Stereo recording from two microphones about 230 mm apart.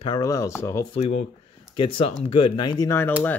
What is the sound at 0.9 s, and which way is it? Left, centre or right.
Speech, left.